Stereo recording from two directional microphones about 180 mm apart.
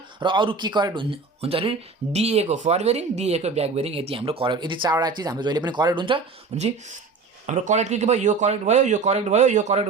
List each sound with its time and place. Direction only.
0.2 s speech: 25° right (ahead or behind)
7.4 s speech: 40° right (ahead or behind)